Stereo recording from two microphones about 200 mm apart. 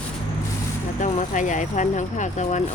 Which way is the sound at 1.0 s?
40° left (ahead or behind).